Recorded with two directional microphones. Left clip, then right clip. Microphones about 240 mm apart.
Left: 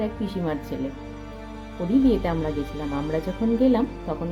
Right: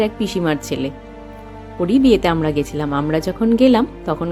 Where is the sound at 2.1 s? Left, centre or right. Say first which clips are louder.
Right 8 dB; right.